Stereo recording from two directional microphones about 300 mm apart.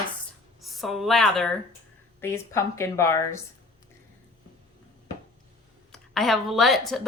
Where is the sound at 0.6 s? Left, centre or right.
Centre.